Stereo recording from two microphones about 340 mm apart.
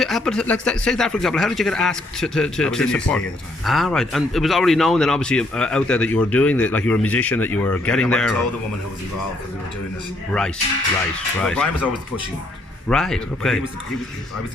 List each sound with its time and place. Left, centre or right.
0.0 s speech: centre
11.3 s speech: centre
12.9 s speech: centre